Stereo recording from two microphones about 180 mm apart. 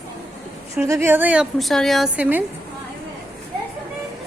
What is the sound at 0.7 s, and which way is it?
A woman's voice, 15° right (ahead or behind).